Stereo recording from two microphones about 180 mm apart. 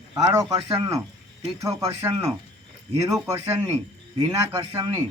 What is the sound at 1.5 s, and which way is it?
Speech, 15° right (ahead or behind).